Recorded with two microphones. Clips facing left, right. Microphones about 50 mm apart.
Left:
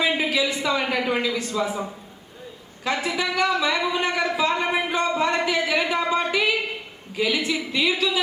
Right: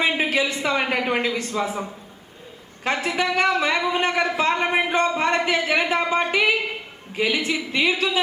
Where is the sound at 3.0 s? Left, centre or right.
Right.